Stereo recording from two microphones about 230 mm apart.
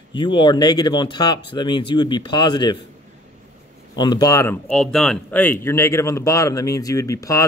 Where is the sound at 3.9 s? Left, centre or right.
Centre.